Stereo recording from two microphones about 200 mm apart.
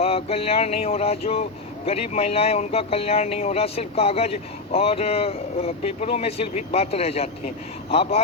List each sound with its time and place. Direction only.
0.0 s speech: 30° left (ahead or behind)